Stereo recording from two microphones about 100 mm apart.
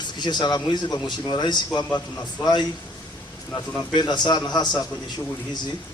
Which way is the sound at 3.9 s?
45° left (ahead or behind).